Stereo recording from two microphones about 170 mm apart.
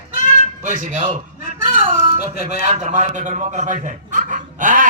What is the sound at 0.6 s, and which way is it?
Speech, 45° right (ahead or behind).